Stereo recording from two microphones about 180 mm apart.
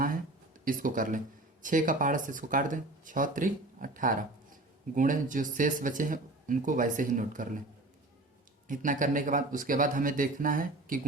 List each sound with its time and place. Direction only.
0.6 s speech: 50° right (ahead or behind)
8.6 s speech: 45° right (ahead or behind)